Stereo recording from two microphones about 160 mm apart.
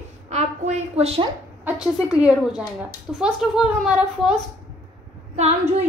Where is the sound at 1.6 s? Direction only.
5° right (ahead or behind).